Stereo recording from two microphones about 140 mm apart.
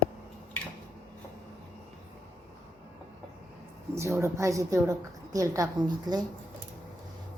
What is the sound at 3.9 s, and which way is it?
A woman's voice, 20° right (ahead or behind).